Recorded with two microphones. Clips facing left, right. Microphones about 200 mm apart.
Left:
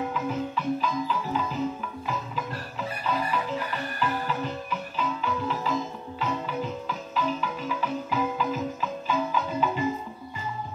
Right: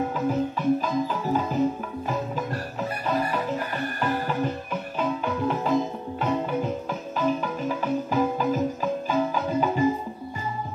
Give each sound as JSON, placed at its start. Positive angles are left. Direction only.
{"t": 0.1, "sound": "music", "side_deg": -45}